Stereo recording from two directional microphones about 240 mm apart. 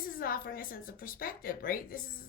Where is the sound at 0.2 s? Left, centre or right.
Left.